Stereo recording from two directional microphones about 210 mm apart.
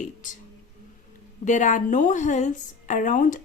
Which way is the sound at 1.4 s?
35° left (ahead or behind).